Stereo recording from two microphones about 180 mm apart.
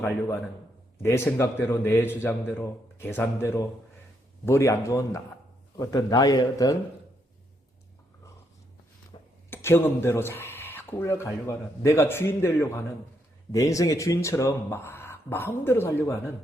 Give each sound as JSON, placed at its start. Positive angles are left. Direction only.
{"t": 1.0, "sound": "speech", "side_deg": 15}
{"t": 9.1, "sound": "a sound", "side_deg": 25}
{"t": 9.5, "sound": "speech", "side_deg": 15}